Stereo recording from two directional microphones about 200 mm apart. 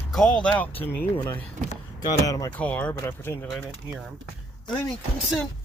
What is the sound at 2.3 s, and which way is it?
Speech, 15° left (ahead or behind).